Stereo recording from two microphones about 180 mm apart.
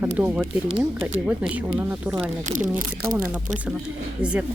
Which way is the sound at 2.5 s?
45° right (ahead or behind).